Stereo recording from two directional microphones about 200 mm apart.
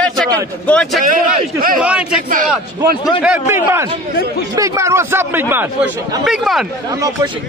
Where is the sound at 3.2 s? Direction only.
5° right (ahead or behind).